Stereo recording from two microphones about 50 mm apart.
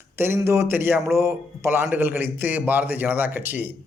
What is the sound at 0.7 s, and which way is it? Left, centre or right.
Speech, right.